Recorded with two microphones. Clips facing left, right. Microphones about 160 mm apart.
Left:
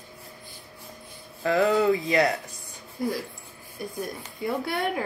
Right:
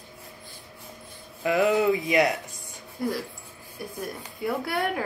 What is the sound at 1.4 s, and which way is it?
Speech, 15° right (ahead or behind).